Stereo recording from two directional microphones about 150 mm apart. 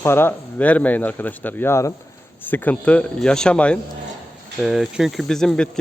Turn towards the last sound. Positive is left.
turn(degrees=5)  # may be behind; listen again after turning